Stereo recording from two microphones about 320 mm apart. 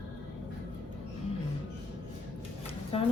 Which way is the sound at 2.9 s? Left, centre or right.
Centre.